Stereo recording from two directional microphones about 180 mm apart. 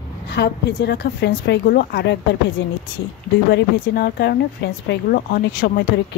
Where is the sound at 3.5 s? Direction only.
60° left (ahead or behind).